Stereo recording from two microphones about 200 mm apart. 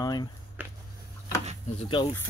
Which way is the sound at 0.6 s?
10° right (ahead or behind).